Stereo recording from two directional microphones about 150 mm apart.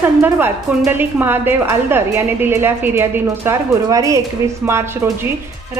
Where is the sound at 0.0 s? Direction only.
15° right (ahead or behind).